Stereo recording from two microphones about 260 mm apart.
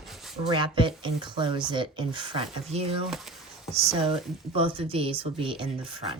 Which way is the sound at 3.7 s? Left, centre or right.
Right.